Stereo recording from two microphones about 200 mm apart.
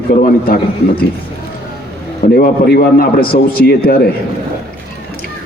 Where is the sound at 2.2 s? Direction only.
45° left (ahead or behind).